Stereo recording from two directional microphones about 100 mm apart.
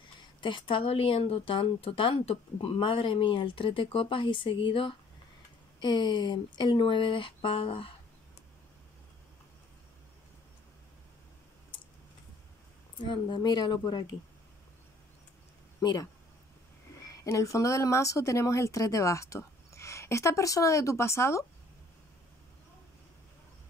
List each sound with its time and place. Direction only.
0.4 s speech: 55° left (ahead or behind)
5.8 s speech: 50° left (ahead or behind); by 7.9 s 65° left (ahead or behind)
12.9 s speech: 50° left (ahead or behind)
15.8 s speech: 45° left (ahead or behind)
17.1 s speech: 30° left (ahead or behind)